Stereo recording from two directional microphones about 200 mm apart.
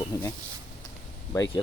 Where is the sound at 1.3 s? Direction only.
15° left (ahead or behind).